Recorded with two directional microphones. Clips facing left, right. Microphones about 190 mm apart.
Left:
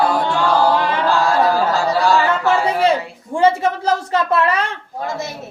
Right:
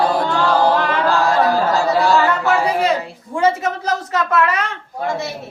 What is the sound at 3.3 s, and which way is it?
Speech, 30° left (ahead or behind).